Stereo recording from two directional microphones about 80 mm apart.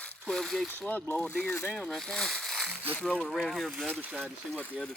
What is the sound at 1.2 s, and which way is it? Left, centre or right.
Speech, centre.